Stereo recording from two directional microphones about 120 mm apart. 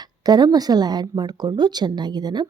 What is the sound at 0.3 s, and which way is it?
A woman's voice, 35° right (ahead or behind).